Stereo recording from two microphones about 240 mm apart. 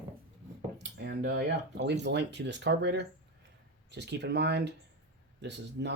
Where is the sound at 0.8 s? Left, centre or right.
Right.